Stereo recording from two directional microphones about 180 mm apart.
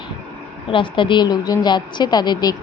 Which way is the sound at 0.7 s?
25° left (ahead or behind).